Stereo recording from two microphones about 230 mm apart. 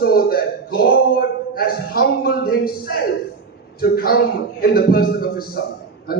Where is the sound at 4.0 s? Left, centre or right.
Left.